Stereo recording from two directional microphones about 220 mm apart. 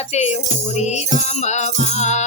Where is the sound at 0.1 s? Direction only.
30° left (ahead or behind).